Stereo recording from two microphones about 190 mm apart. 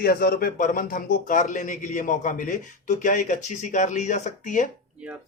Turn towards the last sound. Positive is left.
turn(degrees=40)  # may be behind; listen again after turning